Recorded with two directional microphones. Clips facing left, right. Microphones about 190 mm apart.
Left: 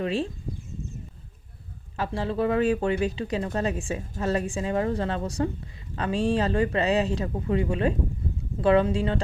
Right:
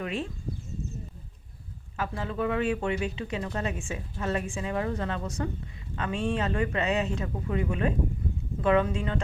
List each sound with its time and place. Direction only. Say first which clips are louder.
0.0 s speech: left 5 dB; 30° left (ahead or behind)
2.0 s speech: left 4 dB; 35° left (ahead or behind)